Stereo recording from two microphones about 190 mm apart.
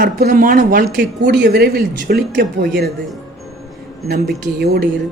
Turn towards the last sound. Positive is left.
turn(degrees=-55)  # may be behind; listen again after turning